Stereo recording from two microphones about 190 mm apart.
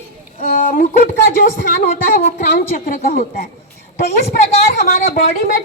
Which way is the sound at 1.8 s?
40° left (ahead or behind).